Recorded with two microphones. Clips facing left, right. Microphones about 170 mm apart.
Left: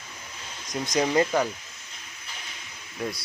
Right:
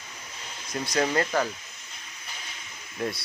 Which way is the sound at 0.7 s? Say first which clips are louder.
Left 2 dB; 20° left (ahead or behind).